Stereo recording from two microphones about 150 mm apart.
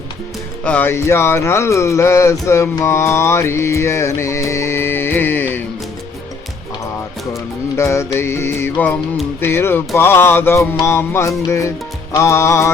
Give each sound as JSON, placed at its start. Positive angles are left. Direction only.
{"t": 0.6, "sound": "speech", "side_deg": 10}
{"t": 7.8, "sound": "speech", "side_deg": 20}
{"t": 12.1, "sound": "music", "side_deg": 20}